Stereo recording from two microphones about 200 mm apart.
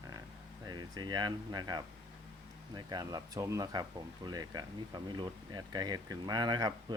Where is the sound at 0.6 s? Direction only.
20° right (ahead or behind).